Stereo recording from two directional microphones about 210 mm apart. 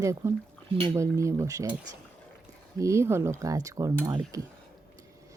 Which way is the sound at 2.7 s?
15° right (ahead or behind).